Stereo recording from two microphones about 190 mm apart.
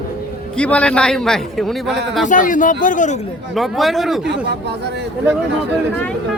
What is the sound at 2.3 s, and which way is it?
Speech, 45° left (ahead or behind).